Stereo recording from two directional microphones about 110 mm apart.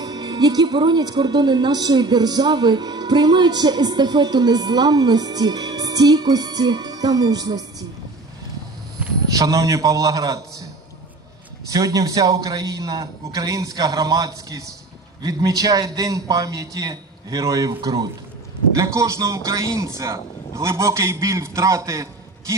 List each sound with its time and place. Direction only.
0.0 s a woman's voice: 40° right (ahead or behind)
9.4 s a woman's voice: 30° right (ahead or behind)
11.7 s a woman's voice: 30° right (ahead or behind)
18.8 s a man's voice: 25° right (ahead or behind)